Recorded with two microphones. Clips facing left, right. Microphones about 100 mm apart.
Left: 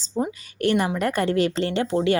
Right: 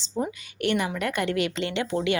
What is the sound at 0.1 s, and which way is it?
Speech, 15° left (ahead or behind).